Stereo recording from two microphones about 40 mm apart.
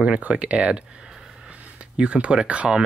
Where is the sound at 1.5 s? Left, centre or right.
Right.